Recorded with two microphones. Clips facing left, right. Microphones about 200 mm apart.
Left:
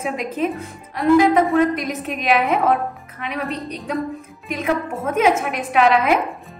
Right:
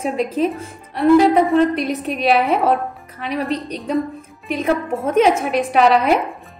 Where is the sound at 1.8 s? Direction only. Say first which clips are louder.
Right 5 dB; 35° right (ahead or behind).